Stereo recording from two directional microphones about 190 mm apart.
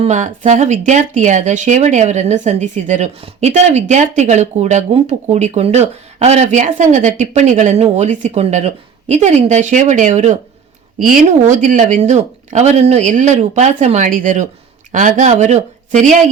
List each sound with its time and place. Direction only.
0.0 s speech: 40° right (ahead or behind)